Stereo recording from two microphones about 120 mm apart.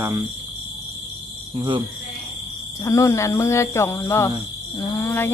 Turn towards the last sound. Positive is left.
turn(degrees=20)  # may be behind; listen again after turning